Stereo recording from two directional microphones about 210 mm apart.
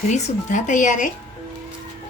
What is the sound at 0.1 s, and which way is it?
Speech, 35° left (ahead or behind).